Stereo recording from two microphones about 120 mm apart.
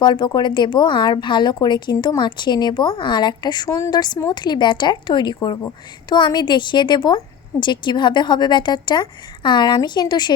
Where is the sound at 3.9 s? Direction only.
35° left (ahead or behind).